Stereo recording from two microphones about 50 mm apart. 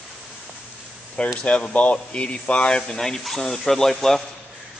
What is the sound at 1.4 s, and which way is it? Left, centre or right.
Speech, left.